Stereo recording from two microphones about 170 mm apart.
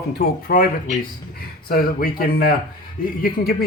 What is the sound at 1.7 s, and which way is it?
Speech, 60° left (ahead or behind).